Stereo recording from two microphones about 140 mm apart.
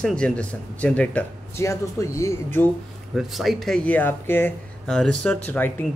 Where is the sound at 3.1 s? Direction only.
Centre (ahead or behind).